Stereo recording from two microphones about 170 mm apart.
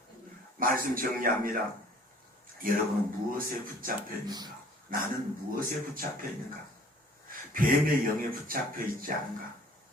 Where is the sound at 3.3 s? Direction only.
55° right (ahead or behind).